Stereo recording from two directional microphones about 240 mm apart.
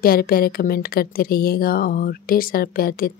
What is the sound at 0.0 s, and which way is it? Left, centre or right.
Speech, left.